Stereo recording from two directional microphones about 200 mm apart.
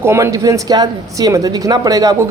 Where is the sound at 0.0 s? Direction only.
15° right (ahead or behind).